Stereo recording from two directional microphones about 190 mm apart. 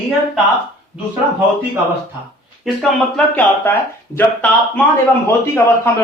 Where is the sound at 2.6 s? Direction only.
Centre (ahead or behind).